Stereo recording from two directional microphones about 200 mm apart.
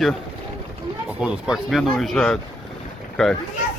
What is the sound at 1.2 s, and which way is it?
Speech, 5° right (ahead or behind).